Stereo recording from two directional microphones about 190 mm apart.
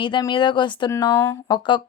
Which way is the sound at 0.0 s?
25° left (ahead or behind).